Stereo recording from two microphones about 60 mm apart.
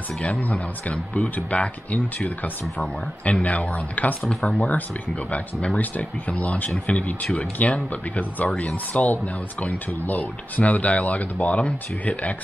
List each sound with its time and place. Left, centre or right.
0.2 s speech: left
4.3 s speech: centre
4.6 s speech: left